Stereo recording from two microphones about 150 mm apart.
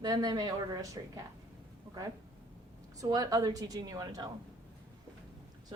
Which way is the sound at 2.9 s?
25° right (ahead or behind).